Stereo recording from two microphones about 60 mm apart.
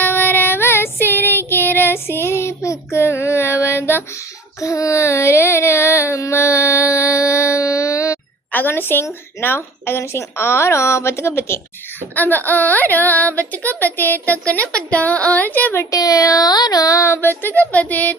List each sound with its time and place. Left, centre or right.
0.0 s child singing: left
4.6 s a sound: left
8.5 s a woman's voice: left
12.1 s speech: left
14.4 s speech: left
15.9 s a sound: left
17.1 s speech: left